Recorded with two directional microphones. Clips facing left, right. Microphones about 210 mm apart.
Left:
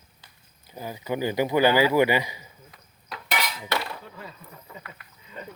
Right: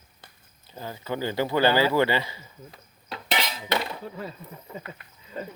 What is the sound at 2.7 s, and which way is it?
Cutlery, 30° right (ahead or behind).